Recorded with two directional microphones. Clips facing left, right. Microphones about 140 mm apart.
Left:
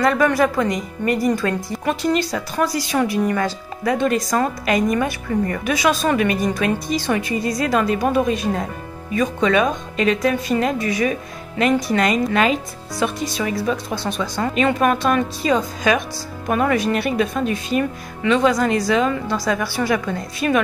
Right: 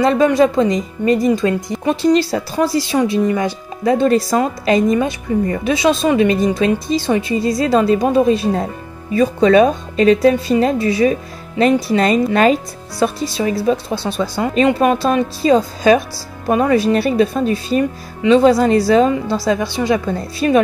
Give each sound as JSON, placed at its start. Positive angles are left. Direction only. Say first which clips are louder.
{"t": 0.0, "sound": "speech", "louder": "right 4 dB", "side_deg": -25}
{"t": 3.9, "sound": "speech", "louder": "right 5 dB", "side_deg": -30}
{"t": 20.1, "sound": "speech", "louder": "right 4 dB", "side_deg": -30}